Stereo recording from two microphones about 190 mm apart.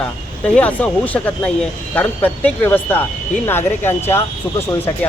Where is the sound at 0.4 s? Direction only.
5° left (ahead or behind).